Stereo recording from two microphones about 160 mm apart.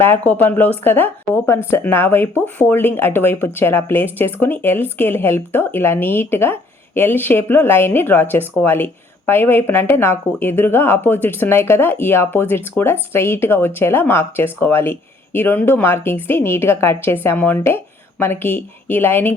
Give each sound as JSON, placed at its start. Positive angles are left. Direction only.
{"t": 0.0, "sound": "speech", "side_deg": 10}